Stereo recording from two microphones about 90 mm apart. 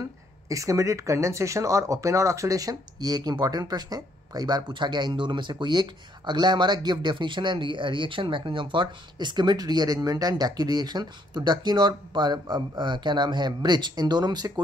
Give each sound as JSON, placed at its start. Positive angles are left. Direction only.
{"t": 0.5, "sound": "speech", "side_deg": -35}